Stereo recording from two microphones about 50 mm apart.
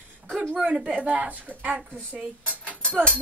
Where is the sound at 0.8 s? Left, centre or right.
Right.